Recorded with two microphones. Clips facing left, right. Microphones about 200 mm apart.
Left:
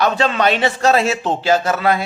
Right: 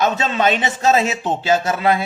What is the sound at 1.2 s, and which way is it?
Speech, 20° right (ahead or behind).